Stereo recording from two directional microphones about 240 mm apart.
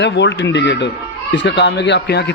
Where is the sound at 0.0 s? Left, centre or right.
Left.